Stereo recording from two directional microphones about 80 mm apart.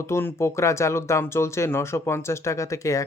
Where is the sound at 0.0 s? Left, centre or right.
Left.